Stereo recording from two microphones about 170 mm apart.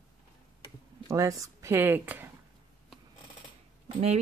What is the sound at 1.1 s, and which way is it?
Speech, 20° right (ahead or behind).